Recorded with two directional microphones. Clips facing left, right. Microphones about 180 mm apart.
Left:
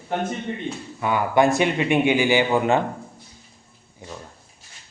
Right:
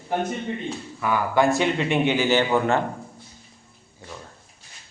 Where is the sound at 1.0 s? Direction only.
20° left (ahead or behind).